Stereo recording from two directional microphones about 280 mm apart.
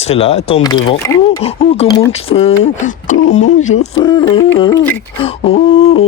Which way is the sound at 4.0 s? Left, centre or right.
Centre.